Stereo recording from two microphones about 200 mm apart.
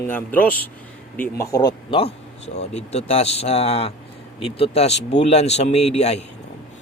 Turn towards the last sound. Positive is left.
turn(degrees=35)  # may be behind; listen again after turning